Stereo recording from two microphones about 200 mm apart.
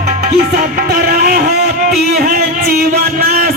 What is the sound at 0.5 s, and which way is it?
Music, 50° right (ahead or behind).